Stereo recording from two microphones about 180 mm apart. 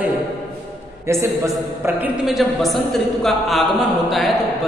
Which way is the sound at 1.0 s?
15° right (ahead or behind).